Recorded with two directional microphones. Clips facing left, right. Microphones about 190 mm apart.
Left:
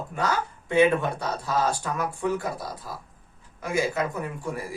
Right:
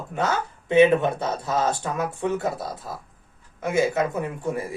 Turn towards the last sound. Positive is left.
turn(degrees=-25)  # may be behind; listen again after turning